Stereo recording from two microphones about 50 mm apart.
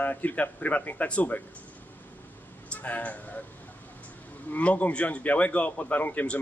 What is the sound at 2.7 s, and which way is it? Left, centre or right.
Speech, left.